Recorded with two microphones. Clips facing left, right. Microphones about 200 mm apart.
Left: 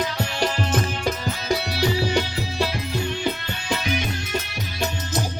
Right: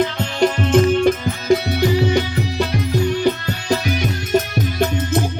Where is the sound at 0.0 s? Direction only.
55° right (ahead or behind).